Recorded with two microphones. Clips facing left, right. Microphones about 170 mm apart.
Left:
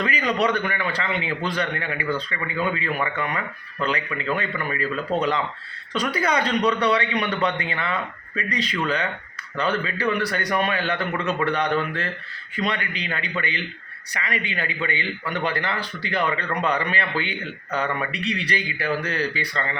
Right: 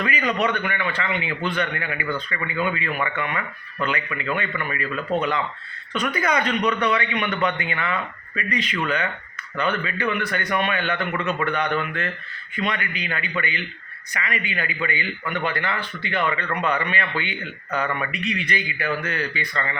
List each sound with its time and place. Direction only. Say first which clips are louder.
0.0 s a man's voice: left 1 dB; 35° left (ahead or behind)